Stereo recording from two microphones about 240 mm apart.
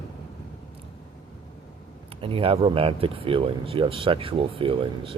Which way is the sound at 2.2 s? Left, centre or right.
Right.